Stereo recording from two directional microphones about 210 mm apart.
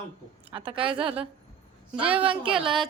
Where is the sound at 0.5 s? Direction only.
25° right (ahead or behind).